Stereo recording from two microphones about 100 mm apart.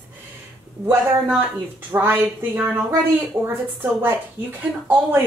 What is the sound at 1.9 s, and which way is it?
Speech, 20° right (ahead or behind).